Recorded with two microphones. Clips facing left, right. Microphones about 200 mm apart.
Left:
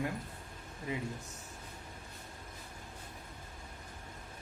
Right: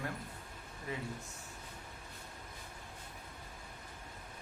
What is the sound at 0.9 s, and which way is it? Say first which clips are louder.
Speech: left 3 dB; 15° left (ahead or behind).